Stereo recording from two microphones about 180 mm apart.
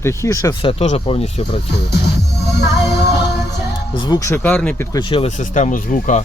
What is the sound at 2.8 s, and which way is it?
Music, 15° right (ahead or behind).